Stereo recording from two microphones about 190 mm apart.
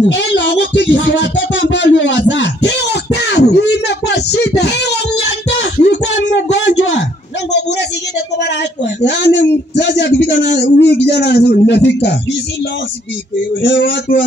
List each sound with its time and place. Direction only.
0.1 s a sound: 65° left (ahead or behind)
9.0 s speech: 65° left (ahead or behind)
13.6 s speech: 70° left (ahead or behind)